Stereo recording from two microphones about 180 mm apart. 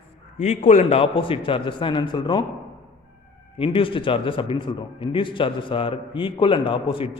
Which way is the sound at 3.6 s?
30° left (ahead or behind).